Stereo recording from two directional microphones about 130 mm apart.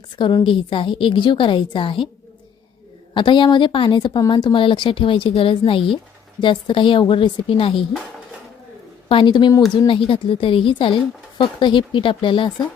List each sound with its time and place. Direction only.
0.2 s a woman's voice: 35° left (ahead or behind)
3.2 s a woman's voice: 40° left (ahead or behind)
9.0 s a woman's voice: 40° left (ahead or behind)